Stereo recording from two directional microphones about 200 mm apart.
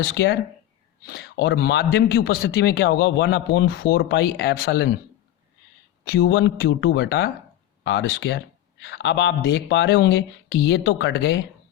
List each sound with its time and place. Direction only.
0.0 s a man's voice: 55° left (ahead or behind)
6.1 s a man's voice: 60° left (ahead or behind)